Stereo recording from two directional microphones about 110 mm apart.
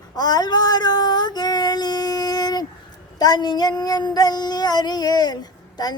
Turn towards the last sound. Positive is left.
turn(degrees=40)  # may be behind; listen again after turning